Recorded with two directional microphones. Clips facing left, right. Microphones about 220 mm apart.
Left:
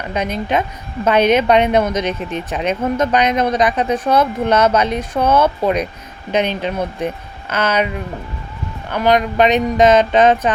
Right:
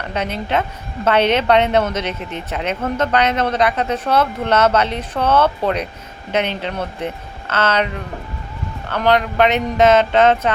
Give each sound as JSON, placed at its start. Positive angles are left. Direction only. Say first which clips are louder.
{"t": 0.1, "sound": "a woman's voice", "louder": "left 2 dB", "side_deg": 15}
{"t": 8.9, "sound": "a woman's voice", "louder": "left 2 dB", "side_deg": 15}